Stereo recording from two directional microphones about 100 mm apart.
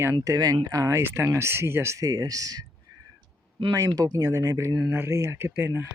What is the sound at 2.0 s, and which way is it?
Speech, 40° right (ahead or behind).